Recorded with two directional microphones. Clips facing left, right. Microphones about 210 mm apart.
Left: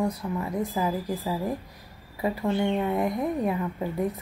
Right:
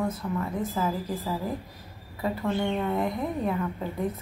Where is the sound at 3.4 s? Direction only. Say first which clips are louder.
Left 1 dB; 15° left (ahead or behind).